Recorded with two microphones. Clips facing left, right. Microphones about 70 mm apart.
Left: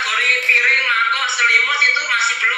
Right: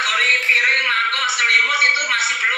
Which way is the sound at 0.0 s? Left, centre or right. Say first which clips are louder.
Even; left.